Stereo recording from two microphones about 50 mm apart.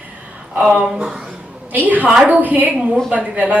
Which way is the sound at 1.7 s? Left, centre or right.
Right.